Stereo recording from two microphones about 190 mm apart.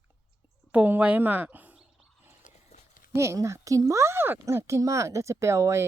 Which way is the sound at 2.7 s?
50° left (ahead or behind).